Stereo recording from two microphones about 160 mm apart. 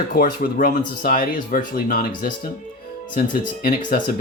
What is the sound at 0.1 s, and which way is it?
Speech, 55° left (ahead or behind).